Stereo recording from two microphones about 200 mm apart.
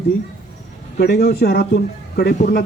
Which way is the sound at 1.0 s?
50° left (ahead or behind).